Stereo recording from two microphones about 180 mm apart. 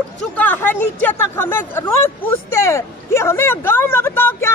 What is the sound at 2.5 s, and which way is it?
Speech, 15° left (ahead or behind).